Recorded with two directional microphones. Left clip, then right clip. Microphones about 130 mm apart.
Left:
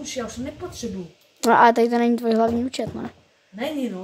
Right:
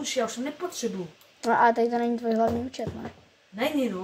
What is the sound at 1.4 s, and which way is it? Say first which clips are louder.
Speech: left 6 dB; 40° left (ahead or behind).